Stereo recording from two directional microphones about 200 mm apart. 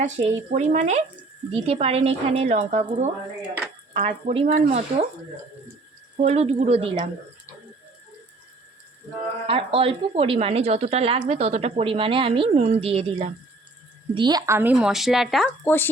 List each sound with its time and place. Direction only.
0.0 s a woman's voice: 35° right (ahead or behind)
6.1 s a woman's voice: 35° right (ahead or behind)
9.5 s speech: 30° right (ahead or behind); by 15.9 s 10° left (ahead or behind)